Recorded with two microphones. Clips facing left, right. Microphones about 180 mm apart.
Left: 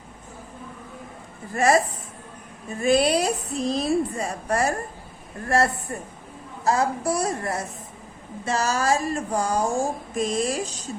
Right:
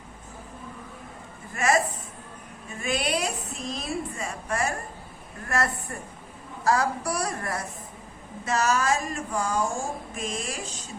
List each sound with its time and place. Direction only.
1.5 s a woman's voice: 35° left (ahead or behind)
2.8 s a woman's voice: 35° left (ahead or behind)